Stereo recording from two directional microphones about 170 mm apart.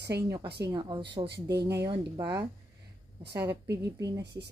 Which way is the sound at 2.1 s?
20° right (ahead or behind).